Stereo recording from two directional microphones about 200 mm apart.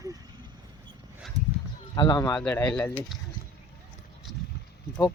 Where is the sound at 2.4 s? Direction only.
5° left (ahead or behind).